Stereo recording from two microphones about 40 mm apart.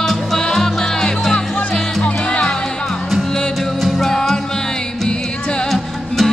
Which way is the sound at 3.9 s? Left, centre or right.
Centre.